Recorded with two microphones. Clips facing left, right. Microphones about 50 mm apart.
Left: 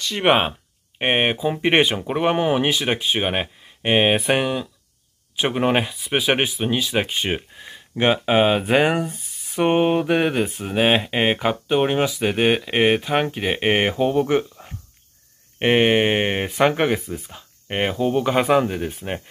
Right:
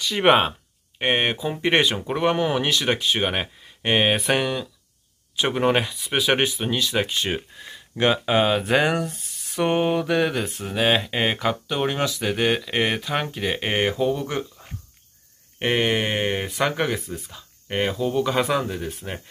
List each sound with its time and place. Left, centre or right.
0.0 s speech: centre
0.5 s speech: left
15.6 s speech: left